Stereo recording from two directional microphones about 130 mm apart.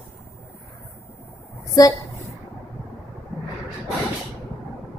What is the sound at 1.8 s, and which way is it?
Speech, 25° left (ahead or behind).